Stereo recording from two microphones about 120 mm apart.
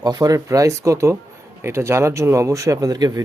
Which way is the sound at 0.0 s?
30° right (ahead or behind).